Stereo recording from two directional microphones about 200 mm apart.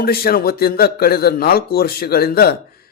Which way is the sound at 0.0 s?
50° left (ahead or behind).